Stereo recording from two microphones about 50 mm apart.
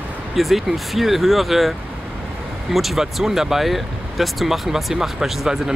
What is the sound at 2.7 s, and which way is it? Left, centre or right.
Speech, centre.